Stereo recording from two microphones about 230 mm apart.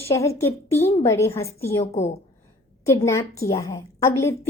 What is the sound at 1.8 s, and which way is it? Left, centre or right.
Speech, left.